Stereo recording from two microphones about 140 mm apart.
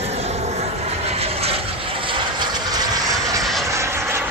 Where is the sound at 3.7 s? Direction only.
20° right (ahead or behind).